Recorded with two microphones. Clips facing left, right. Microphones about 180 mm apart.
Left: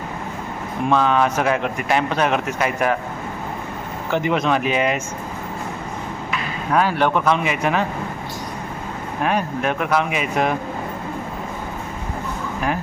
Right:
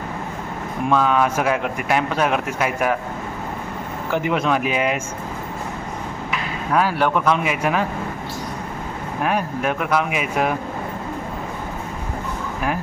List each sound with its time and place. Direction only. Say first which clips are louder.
0.9 s speech: even; 5° right (ahead or behind)
4.1 s speech: left 1 dB; 5° right (ahead or behind)
6.7 s speech: left 1 dB; 5° right (ahead or behind)
9.2 s speech: left 1 dB; 5° right (ahead or behind)